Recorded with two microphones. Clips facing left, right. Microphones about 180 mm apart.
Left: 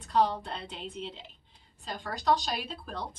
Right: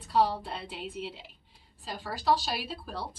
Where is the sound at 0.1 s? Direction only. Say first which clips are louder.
Even; 5° right (ahead or behind).